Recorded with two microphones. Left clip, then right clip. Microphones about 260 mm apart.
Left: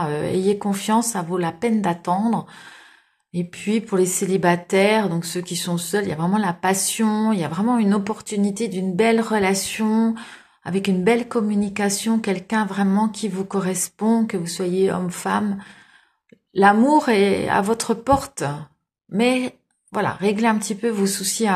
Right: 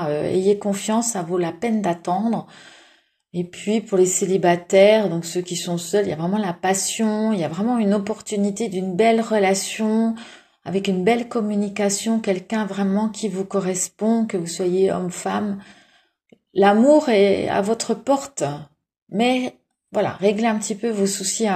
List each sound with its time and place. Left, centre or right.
0.0 s speech: centre
3.3 s speech: centre
16.5 s speech: left